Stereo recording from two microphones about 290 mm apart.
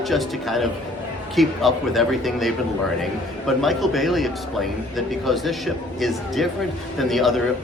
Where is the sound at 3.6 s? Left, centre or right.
Centre.